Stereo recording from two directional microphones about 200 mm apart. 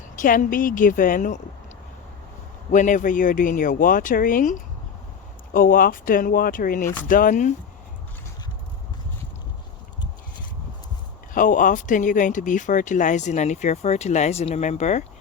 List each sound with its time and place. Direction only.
0.2 s speech: 45° left (ahead or behind)
2.7 s speech: 40° left (ahead or behind)
11.3 s speech: 40° left (ahead or behind)